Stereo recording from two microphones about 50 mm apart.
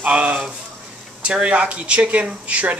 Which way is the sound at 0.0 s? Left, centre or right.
Right.